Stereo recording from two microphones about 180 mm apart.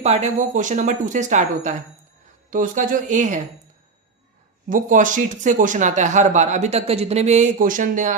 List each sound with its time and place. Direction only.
0.0 s speech: 40° right (ahead or behind)
4.7 s speech: 45° right (ahead or behind)